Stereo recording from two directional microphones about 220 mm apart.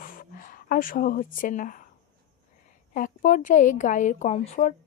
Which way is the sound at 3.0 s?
35° left (ahead or behind).